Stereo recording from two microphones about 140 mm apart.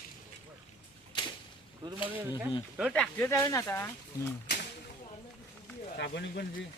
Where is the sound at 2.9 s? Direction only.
15° left (ahead or behind).